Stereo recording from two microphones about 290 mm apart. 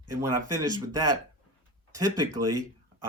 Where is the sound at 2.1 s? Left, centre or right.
Right.